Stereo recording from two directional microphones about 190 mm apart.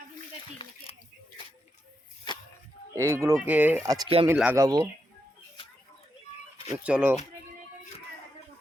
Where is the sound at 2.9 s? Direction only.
15° right (ahead or behind).